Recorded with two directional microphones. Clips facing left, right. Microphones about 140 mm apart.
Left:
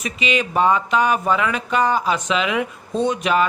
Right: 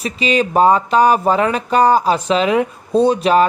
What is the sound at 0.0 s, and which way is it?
Speech, 35° right (ahead or behind).